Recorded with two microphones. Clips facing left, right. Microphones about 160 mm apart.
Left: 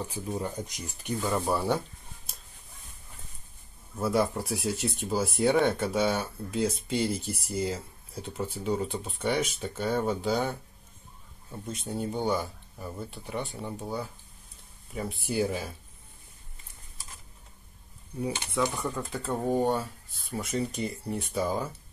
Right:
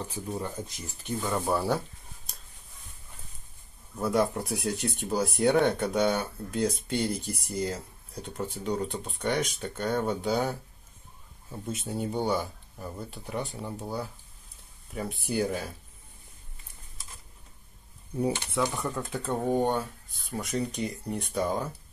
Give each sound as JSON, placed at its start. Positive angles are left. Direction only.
{"t": 0.0, "sound": "speech", "side_deg": 10}
{"t": 1.2, "sound": "speech", "side_deg": 0}
{"t": 4.0, "sound": "speech", "side_deg": 0}
{"t": 18.5, "sound": "speech", "side_deg": 0}